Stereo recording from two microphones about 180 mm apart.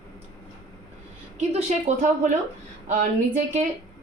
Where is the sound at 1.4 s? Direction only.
40° right (ahead or behind).